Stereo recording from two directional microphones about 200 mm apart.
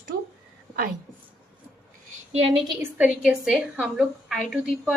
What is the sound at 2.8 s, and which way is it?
A woman's voice, 10° right (ahead or behind).